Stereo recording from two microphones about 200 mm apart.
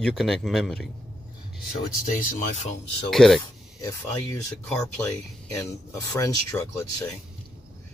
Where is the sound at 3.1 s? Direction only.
Centre (ahead or behind).